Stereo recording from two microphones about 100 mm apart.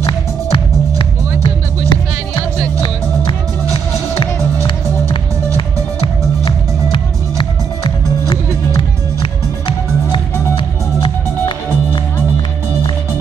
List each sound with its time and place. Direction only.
0.0 s music: 55° left (ahead or behind)
3.3 s music: 55° left (ahead or behind)
6.4 s music: 50° left (ahead or behind)